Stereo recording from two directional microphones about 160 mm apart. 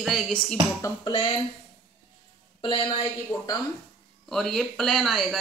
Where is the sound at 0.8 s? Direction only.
30° left (ahead or behind).